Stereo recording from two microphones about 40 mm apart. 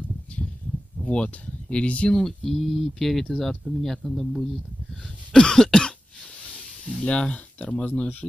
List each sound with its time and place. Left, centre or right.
1.0 s speech: left
2.1 s speech: centre
5.3 s cough: centre
6.9 s speech: left
7.8 s speech: left